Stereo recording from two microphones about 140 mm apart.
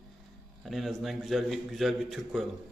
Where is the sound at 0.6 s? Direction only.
Centre (ahead or behind).